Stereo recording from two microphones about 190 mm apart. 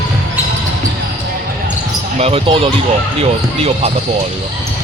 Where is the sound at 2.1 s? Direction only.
30° right (ahead or behind).